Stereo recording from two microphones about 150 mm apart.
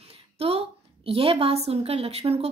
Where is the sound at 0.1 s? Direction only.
40° right (ahead or behind).